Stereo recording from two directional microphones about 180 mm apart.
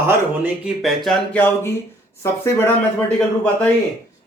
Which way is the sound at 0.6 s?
Centre (ahead or behind).